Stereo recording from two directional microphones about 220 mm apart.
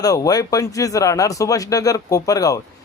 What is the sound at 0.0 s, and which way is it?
A man's voice, 15° left (ahead or behind).